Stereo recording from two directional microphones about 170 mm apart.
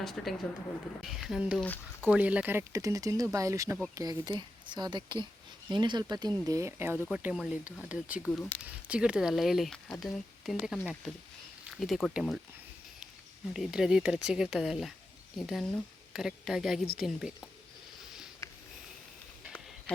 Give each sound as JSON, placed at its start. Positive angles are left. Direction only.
{"t": 0.0, "sound": "speech", "side_deg": 0}
{"t": 1.6, "sound": "speech", "side_deg": 10}
{"t": 2.0, "sound": "speech", "side_deg": -10}
{"t": 8.3, "sound": "speech", "side_deg": 10}
{"t": 8.6, "sound": "speech", "side_deg": -5}
{"t": 13.5, "sound": "speech", "side_deg": 0}
{"t": 18.4, "sound": "a sound", "side_deg": 20}